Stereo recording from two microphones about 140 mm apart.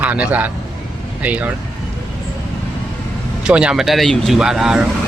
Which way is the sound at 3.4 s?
5° right (ahead or behind).